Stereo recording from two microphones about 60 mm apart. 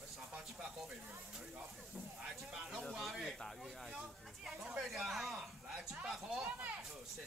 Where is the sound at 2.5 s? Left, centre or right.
Centre.